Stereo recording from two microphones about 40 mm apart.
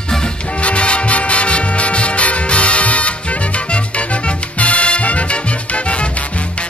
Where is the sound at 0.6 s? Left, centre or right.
Left.